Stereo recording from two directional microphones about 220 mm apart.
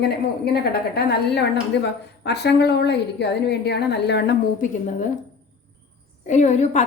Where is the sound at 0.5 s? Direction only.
45° left (ahead or behind).